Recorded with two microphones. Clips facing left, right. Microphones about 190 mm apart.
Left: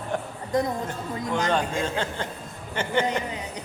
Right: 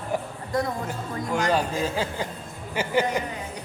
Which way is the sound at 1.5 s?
5° right (ahead or behind).